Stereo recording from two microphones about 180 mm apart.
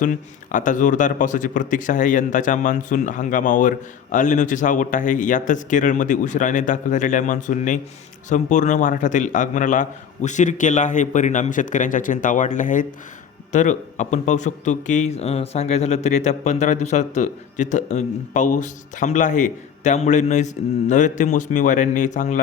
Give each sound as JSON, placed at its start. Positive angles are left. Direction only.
{"t": 0.0, "sound": "a man's voice", "side_deg": 45}